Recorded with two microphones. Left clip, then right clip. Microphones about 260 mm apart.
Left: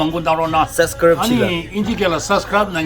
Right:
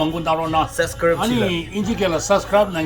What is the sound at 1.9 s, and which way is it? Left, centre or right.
Speech, centre.